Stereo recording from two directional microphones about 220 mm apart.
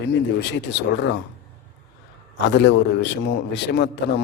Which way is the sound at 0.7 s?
50° left (ahead or behind).